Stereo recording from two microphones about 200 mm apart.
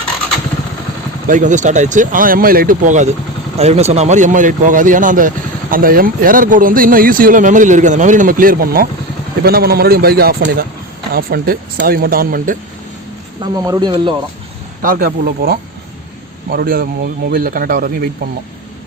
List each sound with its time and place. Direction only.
1.3 s speech: 40° right (ahead or behind)
13.4 s speech: 20° right (ahead or behind)
14.8 s speech: 45° right (ahead or behind)